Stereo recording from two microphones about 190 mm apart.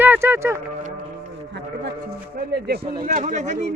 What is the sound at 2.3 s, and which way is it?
Speech, 55° right (ahead or behind).